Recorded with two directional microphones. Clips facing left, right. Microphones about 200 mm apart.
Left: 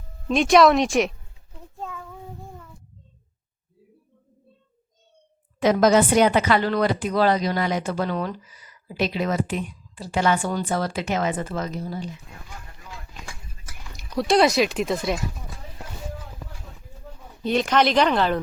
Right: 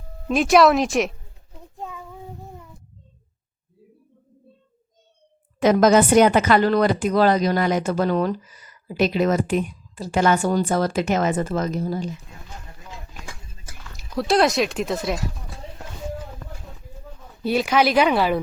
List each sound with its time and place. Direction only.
0.3 s speech: centre (ahead or behind)
1.8 s child singing: 15° right (ahead or behind)
5.5 s a woman's voice: 50° right (ahead or behind)
13.9 s speech: centre (ahead or behind)
17.4 s speech: 5° right (ahead or behind)